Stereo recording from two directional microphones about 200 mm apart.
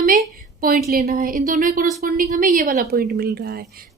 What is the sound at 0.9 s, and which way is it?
A woman's voice, 50° right (ahead or behind).